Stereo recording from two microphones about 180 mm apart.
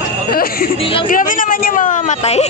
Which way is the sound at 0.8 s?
30° left (ahead or behind).